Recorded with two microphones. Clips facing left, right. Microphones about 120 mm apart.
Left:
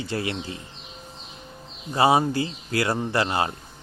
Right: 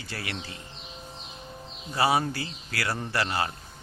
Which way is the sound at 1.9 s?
25° left (ahead or behind).